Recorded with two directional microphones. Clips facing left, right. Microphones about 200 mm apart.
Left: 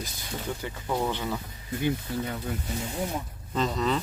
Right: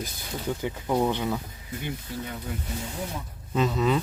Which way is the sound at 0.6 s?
15° right (ahead or behind).